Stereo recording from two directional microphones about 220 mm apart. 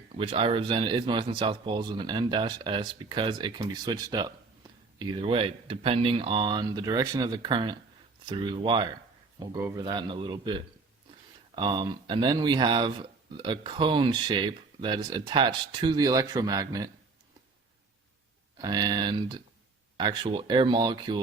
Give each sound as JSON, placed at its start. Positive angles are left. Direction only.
{"t": 0.2, "sound": "speech", "side_deg": -25}
{"t": 11.5, "sound": "speech", "side_deg": -20}
{"t": 18.5, "sound": "speech", "side_deg": -15}